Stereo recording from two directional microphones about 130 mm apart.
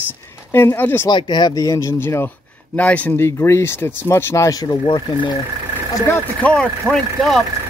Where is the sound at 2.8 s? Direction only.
15° left (ahead or behind).